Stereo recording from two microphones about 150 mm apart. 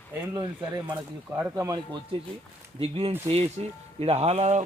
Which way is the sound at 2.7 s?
40° right (ahead or behind).